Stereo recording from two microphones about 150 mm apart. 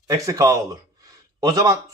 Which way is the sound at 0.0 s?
20° right (ahead or behind).